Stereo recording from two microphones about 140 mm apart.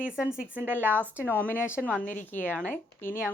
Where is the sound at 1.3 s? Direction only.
15° left (ahead or behind).